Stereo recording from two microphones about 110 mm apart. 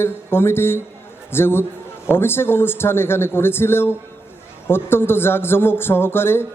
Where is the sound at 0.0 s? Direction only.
20° left (ahead or behind).